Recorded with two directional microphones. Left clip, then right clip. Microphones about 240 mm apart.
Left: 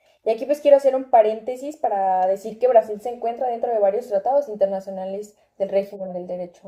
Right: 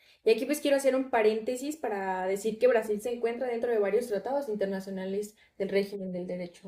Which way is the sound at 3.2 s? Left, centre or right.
Centre.